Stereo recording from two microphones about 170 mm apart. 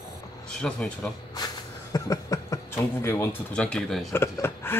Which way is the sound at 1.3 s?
20° left (ahead or behind).